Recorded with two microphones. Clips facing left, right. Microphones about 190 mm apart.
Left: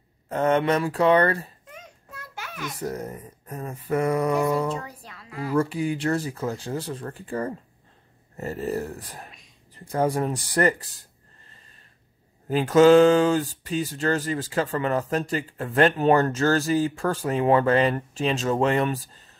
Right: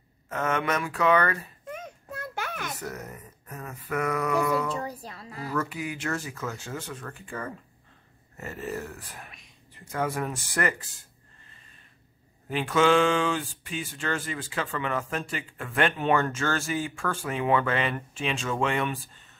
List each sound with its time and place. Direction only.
0.3 s speech: 30° left (ahead or behind)
1.7 s a sound: 55° right (ahead or behind)
2.8 s speech: 30° left (ahead or behind)
4.8 s a woman's voice: 35° right (ahead or behind)
5.5 s speech: 30° left (ahead or behind)
12.4 s speech: 40° left (ahead or behind)